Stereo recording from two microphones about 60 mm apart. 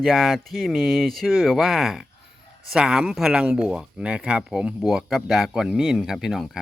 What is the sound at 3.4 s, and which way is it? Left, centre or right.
Speech, centre.